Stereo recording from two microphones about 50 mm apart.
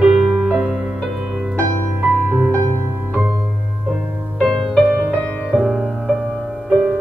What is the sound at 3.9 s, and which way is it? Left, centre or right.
Music, centre.